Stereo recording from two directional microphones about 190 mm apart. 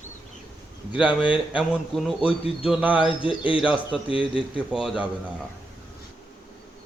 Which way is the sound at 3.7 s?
25° left (ahead or behind).